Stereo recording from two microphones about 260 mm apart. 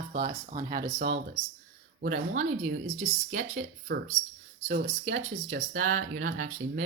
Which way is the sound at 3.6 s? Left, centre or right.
Right.